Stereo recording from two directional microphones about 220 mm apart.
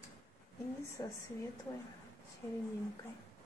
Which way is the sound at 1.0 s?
20° left (ahead or behind).